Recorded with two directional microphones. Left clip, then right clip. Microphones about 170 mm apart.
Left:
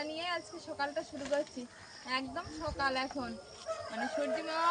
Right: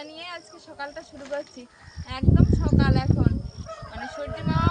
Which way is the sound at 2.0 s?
10° right (ahead or behind).